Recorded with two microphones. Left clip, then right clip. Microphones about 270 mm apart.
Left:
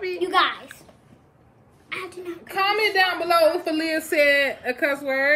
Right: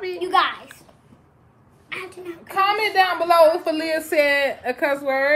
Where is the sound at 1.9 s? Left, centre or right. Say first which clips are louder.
Even; centre.